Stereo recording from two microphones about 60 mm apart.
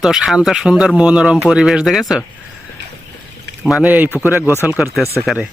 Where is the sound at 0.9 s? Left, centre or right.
Centre.